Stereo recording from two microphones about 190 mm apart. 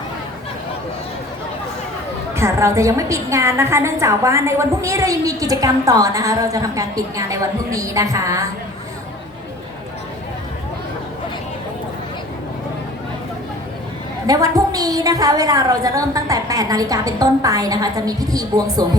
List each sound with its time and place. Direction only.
2.3 s a woman's voice: 15° right (ahead or behind)
14.3 s a woman's voice: 20° right (ahead or behind)